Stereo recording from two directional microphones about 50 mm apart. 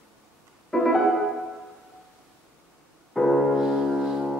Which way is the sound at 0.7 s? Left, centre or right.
Centre.